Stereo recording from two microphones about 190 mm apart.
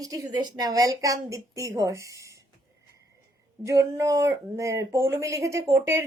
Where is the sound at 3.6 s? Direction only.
15° right (ahead or behind).